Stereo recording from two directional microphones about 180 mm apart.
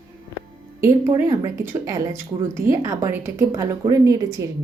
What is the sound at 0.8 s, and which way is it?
Speech, 15° right (ahead or behind).